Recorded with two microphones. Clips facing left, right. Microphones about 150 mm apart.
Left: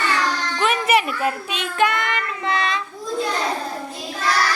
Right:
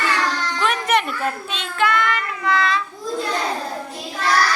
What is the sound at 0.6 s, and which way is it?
Child singing, 5° left (ahead or behind).